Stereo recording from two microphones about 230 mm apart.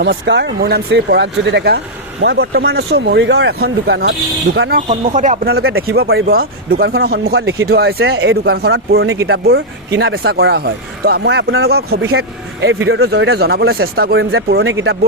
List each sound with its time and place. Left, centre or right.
0.0 s speech: right
4.9 s speech: right
5.5 s speech: right
6.2 s speech: right
11.7 s speech: right